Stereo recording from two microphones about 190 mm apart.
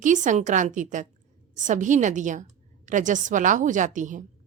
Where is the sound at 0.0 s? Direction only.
40° right (ahead or behind).